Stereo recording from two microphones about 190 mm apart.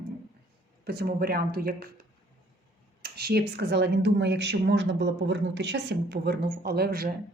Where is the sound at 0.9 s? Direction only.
55° right (ahead or behind).